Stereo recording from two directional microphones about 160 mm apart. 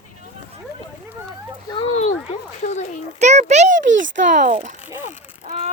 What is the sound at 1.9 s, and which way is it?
Speech, 45° left (ahead or behind).